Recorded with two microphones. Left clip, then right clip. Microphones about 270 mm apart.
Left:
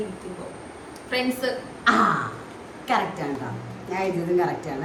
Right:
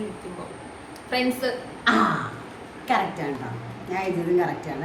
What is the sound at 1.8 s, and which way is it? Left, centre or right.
A woman's voice, centre.